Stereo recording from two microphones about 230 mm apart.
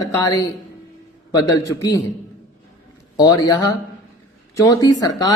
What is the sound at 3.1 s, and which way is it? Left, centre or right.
A man's voice, centre.